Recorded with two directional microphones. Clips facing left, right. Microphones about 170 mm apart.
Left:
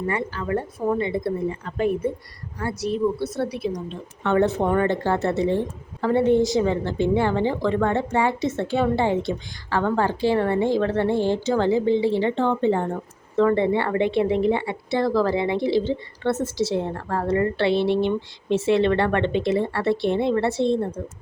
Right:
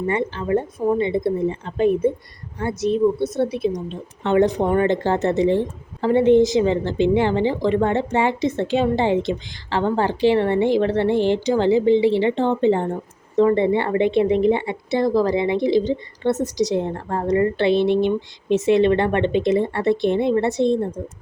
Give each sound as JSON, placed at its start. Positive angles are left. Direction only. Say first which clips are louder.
{"t": 0.1, "sound": "a woman's voice", "louder": "right 6 dB", "side_deg": -25}